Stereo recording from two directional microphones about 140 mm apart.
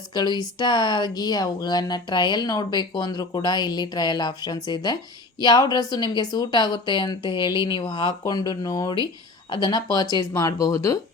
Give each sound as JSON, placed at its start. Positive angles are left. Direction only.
{"t": 0.1, "sound": "speech", "side_deg": 30}